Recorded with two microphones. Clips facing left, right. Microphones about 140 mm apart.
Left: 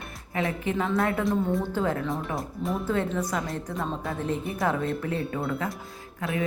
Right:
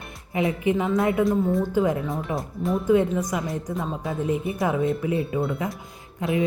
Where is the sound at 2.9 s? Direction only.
15° right (ahead or behind).